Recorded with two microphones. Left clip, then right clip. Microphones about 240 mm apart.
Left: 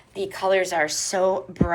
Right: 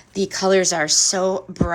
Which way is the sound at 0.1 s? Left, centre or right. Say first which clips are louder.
Right 4 dB; right.